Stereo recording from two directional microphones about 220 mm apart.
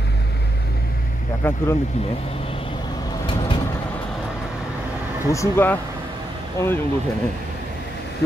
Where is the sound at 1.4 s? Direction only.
10° left (ahead or behind).